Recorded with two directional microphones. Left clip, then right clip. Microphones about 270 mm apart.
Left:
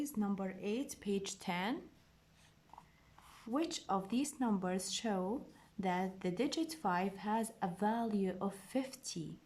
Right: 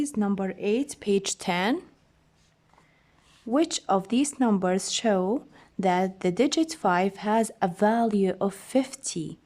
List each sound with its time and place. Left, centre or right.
0.0 s speech: right
3.5 s speech: right